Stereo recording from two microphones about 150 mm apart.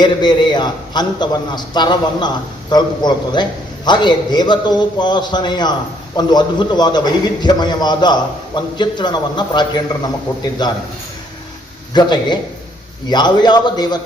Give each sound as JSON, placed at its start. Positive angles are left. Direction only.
{"t": 0.0, "sound": "a man's voice", "side_deg": 30}
{"t": 11.9, "sound": "a man's voice", "side_deg": 30}